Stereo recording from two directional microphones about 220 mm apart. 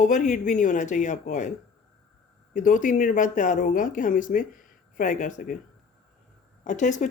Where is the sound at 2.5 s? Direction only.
35° left (ahead or behind).